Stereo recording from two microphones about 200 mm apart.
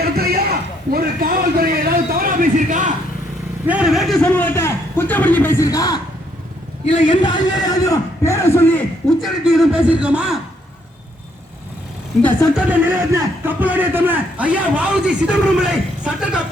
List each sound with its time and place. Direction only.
0.0 s a sound: 50° right (ahead or behind)
3.7 s a man's voice: 5° right (ahead or behind)
12.8 s a man's voice: 15° right (ahead or behind)